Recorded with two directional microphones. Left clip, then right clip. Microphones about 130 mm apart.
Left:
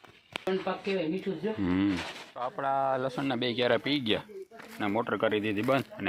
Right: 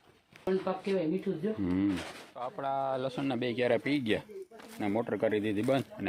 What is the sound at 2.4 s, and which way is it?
Speech, 40° left (ahead or behind).